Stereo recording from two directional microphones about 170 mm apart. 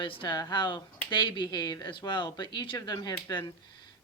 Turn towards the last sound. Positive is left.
turn(degrees=25)  # may be behind; listen again after turning